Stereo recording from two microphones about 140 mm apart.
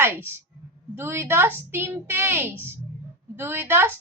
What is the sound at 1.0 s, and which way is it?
A woman's voice, 15° right (ahead or behind).